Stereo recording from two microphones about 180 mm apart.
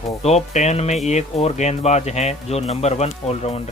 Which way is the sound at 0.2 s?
35° left (ahead or behind).